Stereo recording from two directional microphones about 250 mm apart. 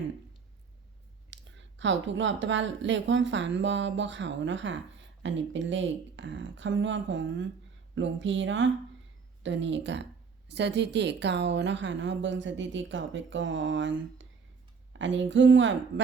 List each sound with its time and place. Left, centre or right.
1.3 s a woman's voice: right